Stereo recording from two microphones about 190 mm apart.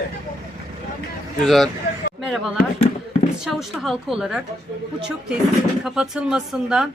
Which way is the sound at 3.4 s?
Centre (ahead or behind).